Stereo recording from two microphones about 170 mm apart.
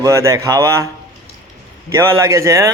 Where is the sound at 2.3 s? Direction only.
20° right (ahead or behind).